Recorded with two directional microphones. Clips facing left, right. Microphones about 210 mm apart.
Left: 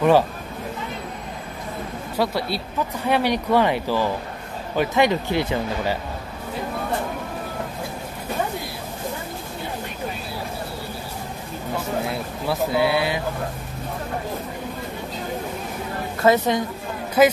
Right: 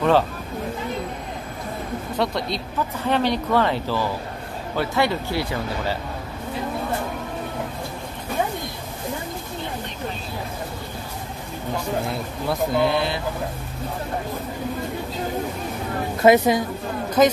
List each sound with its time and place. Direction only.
2.1 s speech: 5° left (ahead or behind)
12.1 s speech: 5° left (ahead or behind)
16.2 s a woman's voice: 15° right (ahead or behind)
17.2 s speech: 10° left (ahead or behind)